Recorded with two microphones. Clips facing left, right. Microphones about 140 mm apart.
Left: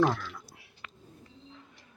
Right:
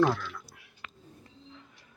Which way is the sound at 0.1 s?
5° left (ahead or behind).